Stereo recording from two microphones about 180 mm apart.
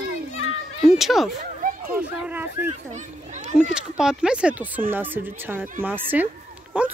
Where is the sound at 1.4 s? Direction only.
50° right (ahead or behind).